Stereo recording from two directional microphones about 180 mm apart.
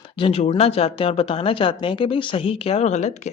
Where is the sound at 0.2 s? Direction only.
30° left (ahead or behind).